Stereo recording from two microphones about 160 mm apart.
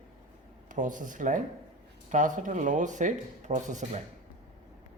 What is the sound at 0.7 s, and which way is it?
Speech, 55° right (ahead or behind).